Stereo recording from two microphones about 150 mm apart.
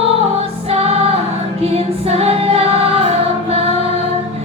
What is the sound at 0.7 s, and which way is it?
Music, 40° right (ahead or behind).